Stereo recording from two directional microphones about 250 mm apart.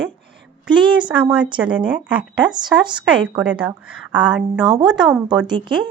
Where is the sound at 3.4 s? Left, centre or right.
Centre.